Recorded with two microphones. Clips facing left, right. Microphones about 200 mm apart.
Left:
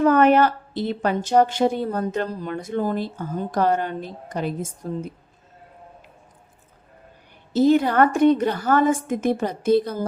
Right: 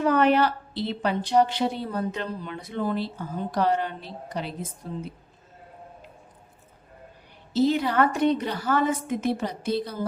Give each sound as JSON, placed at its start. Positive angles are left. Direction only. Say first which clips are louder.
{"t": 0.0, "sound": "a woman's voice", "louder": "left 5 dB", "side_deg": 50}
{"t": 7.5, "sound": "a woman's voice", "louder": "left 5 dB", "side_deg": 50}